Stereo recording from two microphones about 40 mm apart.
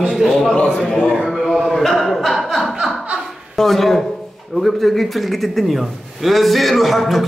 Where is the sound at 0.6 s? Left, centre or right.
Left.